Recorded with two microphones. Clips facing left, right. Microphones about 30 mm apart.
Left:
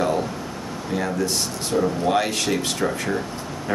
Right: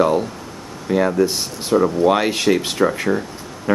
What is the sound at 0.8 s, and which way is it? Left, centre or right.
Speech, centre.